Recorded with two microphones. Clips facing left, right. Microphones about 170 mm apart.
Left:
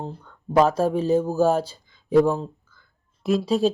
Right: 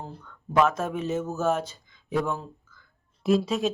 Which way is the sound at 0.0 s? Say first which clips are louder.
Left 6 dB; 30° left (ahead or behind).